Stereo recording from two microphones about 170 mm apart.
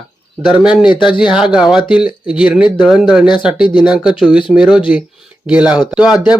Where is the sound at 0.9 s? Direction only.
30° left (ahead or behind).